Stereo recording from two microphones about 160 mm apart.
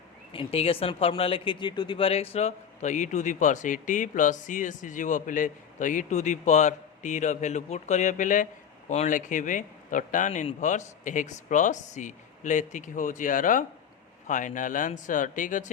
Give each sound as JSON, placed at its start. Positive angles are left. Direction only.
{"t": 0.3, "sound": "speech", "side_deg": 35}